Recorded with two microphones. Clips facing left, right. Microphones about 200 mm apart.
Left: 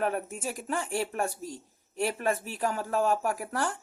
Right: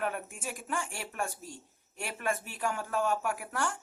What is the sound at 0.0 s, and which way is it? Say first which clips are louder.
Speech: left 5 dB; 40° left (ahead or behind).